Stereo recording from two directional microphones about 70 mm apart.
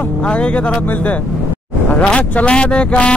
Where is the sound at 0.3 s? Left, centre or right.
Centre.